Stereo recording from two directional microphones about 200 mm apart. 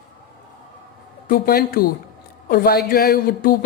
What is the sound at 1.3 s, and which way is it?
Speech, 50° left (ahead or behind).